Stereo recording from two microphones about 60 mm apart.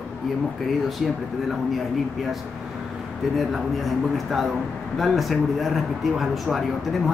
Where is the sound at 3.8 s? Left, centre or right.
Centre.